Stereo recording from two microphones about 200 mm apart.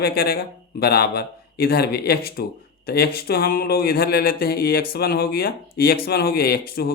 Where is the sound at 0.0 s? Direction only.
50° left (ahead or behind).